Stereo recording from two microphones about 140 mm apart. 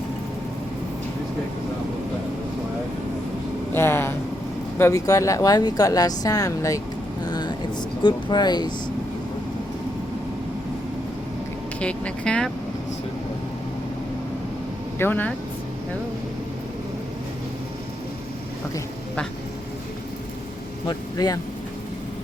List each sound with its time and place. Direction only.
3.8 s a sound: 15° left (ahead or behind)
4.8 s speech: 25° left (ahead or behind)
7.3 s vehicle: 30° left (ahead or behind)
8.0 s speech: 30° left (ahead or behind)
11.8 s speech: 10° left (ahead or behind)
14.9 s speech: 15° left (ahead or behind)
20.8 s speech: 30° left (ahead or behind)